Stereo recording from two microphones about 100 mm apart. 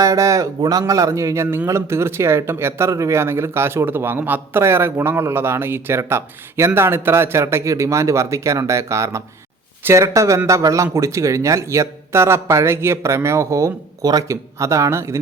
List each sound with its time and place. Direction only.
0.0 s speech: 35° right (ahead or behind)